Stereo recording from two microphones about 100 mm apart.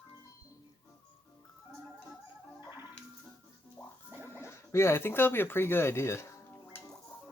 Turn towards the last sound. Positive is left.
turn(degrees=25)  # may be behind; listen again after turning